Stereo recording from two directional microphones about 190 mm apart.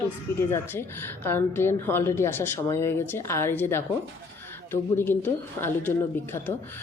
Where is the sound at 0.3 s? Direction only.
15° left (ahead or behind).